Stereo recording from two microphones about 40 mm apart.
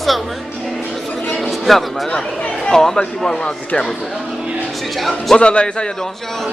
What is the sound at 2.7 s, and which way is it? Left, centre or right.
Speech, centre.